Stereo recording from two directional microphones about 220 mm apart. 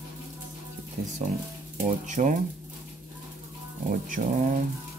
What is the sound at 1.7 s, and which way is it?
Speech, 35° right (ahead or behind).